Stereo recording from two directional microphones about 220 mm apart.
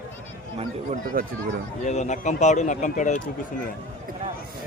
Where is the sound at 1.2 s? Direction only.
40° right (ahead or behind).